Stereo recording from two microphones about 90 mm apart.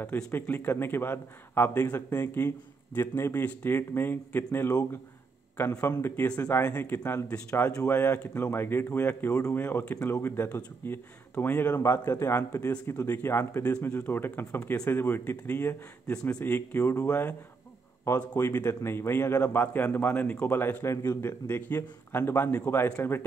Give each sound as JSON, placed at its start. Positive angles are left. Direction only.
{"t": 0.0, "sound": "a man's voice", "side_deg": 20}
{"t": 6.2, "sound": "a man's voice", "side_deg": 15}
{"t": 9.3, "sound": "speech", "side_deg": 35}
{"t": 9.6, "sound": "a man's voice", "side_deg": 20}